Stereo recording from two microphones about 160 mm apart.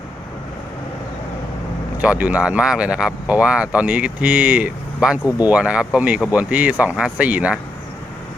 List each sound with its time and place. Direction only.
2.0 s speech: 10° right (ahead or behind)